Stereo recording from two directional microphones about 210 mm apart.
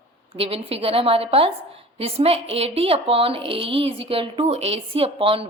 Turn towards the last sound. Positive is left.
turn(degrees=-25)  # may be behind; listen again after turning